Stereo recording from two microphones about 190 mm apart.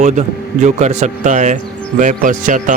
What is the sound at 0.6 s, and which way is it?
Speech, 35° right (ahead or behind).